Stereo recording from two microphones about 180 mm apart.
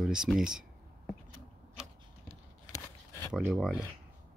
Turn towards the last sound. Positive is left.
turn(degrees=-5)  # may be behind; listen again after turning